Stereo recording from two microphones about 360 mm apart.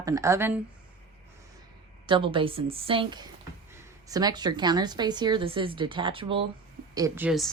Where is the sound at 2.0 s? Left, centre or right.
Centre.